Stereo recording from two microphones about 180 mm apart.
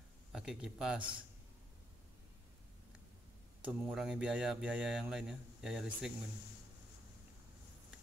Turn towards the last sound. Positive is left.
turn(degrees=-5)  # may be behind; listen again after turning